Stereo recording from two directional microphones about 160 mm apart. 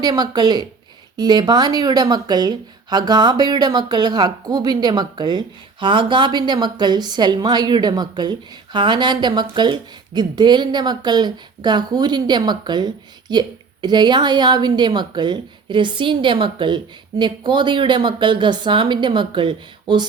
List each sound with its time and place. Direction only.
0.0 s speech: 25° right (ahead or behind)